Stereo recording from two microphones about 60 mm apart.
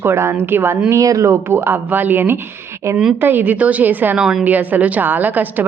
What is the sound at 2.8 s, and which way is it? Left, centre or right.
Speech, right.